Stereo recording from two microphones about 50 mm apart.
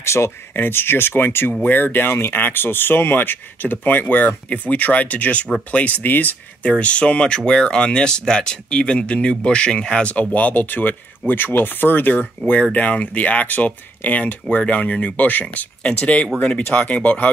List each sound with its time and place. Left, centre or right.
0.0 s speech: left
0.6 s speech: left
4.3 s speech: left
6.6 s speech: left
10.3 s speech: left